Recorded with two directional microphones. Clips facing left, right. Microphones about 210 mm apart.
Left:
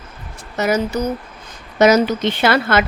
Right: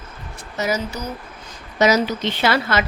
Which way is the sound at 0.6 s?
60° left (ahead or behind).